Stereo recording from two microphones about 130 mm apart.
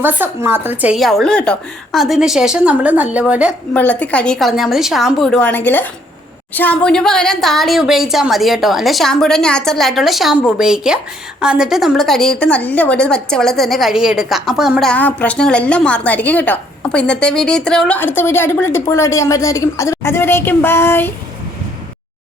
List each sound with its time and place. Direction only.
0.0 s speech: 15° right (ahead or behind)
0.9 s a woman's voice: centre (ahead or behind)
3.8 s a woman's voice: 10° left (ahead or behind)
5.4 s a woman's voice: 15° left (ahead or behind)